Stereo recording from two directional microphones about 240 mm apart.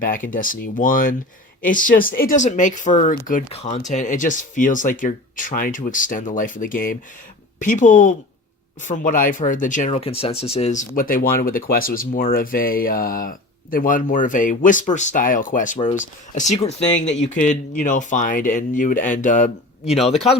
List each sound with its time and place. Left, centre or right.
0.3 s speech: left